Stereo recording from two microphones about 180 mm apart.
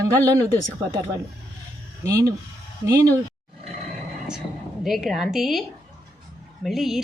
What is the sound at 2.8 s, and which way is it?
Speech, 15° right (ahead or behind).